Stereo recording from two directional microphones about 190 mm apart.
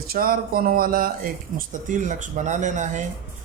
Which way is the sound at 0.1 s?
50° right (ahead or behind).